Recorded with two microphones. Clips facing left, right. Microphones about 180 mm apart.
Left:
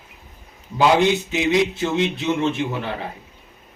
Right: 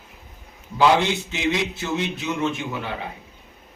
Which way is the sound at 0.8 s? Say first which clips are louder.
Left 2 dB; 15° left (ahead or behind).